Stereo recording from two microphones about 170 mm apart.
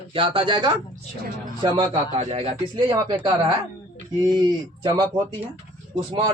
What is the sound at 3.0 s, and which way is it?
Speech, 25° right (ahead or behind).